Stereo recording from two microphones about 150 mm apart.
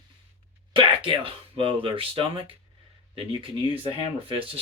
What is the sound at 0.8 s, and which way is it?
Speech, 40° right (ahead or behind).